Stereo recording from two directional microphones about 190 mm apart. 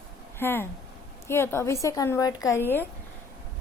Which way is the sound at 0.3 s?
10° left (ahead or behind).